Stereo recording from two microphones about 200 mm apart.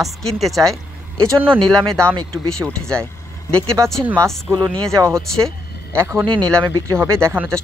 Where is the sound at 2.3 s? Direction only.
5° left (ahead or behind).